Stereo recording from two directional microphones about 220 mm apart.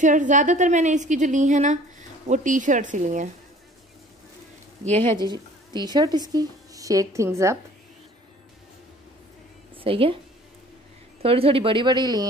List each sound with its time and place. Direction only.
0.0 s a woman's voice: 35° right (ahead or behind)
4.8 s speech: 5° left (ahead or behind)
5.1 s a woman's voice: 20° right (ahead or behind)
9.8 s a woman's voice: 25° right (ahead or behind)
11.2 s speech: 25° right (ahead or behind)